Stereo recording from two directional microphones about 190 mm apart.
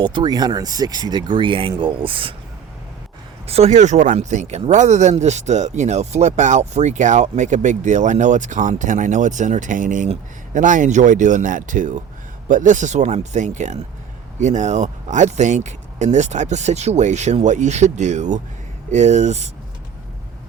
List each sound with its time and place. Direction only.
0.0 s speech: 25° right (ahead or behind)
3.4 s speech: 35° right (ahead or behind)